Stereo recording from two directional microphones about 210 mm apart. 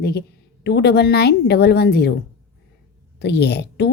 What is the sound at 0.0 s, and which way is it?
A woman's voice, 50° left (ahead or behind).